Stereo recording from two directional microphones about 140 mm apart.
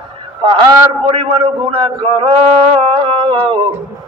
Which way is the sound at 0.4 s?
35° right (ahead or behind).